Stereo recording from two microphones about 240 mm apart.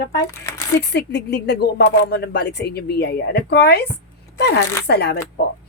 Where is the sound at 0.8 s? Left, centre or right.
Left.